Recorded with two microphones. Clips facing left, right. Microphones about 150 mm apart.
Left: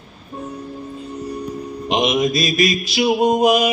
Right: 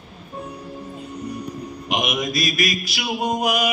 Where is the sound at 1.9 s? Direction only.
25° left (ahead or behind).